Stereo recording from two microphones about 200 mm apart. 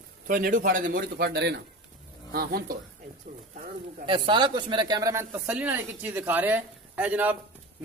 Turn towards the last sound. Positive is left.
turn(degrees=-10)  # may be behind; listen again after turning